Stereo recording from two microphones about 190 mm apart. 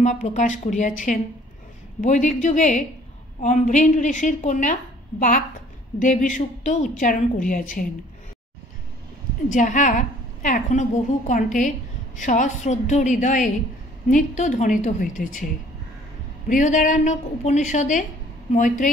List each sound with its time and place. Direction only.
0.0 s a woman's voice: 40° left (ahead or behind)
5.9 s a woman's voice: 45° left (ahead or behind)
9.5 s a woman's voice: 40° left (ahead or behind)
16.4 s a woman's voice: 40° left (ahead or behind)